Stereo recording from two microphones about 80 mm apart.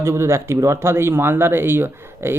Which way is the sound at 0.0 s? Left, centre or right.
Right.